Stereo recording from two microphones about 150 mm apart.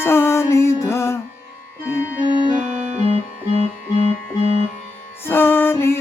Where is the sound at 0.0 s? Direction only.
15° left (ahead or behind).